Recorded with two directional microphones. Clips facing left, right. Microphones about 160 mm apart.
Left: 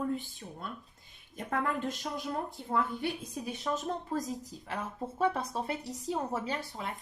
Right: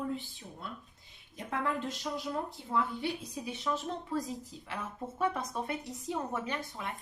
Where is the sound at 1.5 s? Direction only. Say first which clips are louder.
Left 2 dB; 50° left (ahead or behind).